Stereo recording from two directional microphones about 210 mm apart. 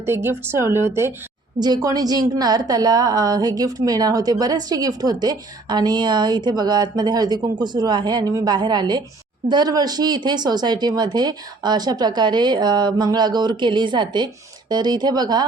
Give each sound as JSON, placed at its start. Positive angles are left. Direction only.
{"t": 0.0, "sound": "a woman's voice", "side_deg": -10}